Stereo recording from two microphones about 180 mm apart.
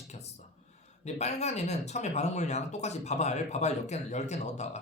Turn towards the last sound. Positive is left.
turn(degrees=40)  # may be behind; listen again after turning